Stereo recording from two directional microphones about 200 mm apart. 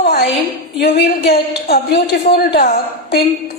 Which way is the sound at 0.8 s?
50° left (ahead or behind).